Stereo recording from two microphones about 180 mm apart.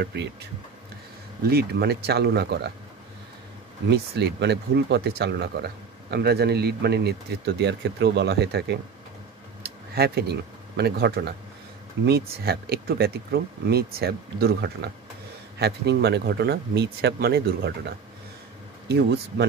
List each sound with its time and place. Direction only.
0.0 s speech: 70° right (ahead or behind)
1.5 s speech: 65° right (ahead or behind)
3.9 s speech: 65° right (ahead or behind)
9.6 s a sound: 60° right (ahead or behind)
10.8 s speech: 60° right (ahead or behind)